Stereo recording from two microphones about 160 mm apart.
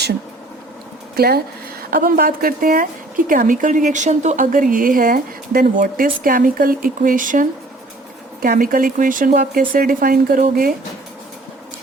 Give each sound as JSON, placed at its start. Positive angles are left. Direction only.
{"t": 1.1, "sound": "a woman's voice", "side_deg": -75}